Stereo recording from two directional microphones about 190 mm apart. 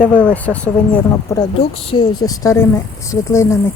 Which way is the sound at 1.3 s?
25° left (ahead or behind).